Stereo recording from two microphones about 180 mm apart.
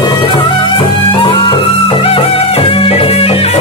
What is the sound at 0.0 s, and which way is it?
Music, 25° left (ahead or behind).